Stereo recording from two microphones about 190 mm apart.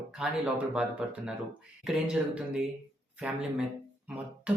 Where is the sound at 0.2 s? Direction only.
5° right (ahead or behind).